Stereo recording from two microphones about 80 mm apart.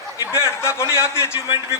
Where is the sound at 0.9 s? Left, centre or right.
Left.